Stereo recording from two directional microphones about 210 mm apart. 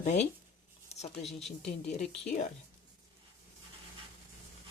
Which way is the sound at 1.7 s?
30° left (ahead or behind).